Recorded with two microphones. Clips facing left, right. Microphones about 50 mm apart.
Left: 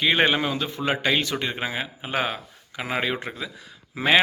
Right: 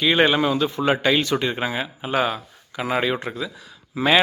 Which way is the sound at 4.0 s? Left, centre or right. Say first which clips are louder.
Right 2 dB; centre.